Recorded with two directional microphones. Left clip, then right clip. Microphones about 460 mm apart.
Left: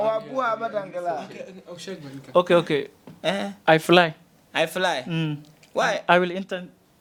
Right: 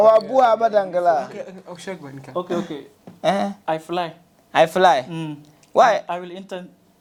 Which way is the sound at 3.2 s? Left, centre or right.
Centre.